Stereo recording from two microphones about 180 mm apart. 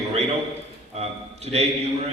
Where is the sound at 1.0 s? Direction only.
35° right (ahead or behind).